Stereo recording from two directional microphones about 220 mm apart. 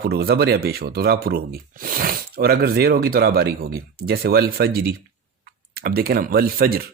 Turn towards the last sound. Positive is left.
turn(degrees=-40)  # may be behind; listen again after turning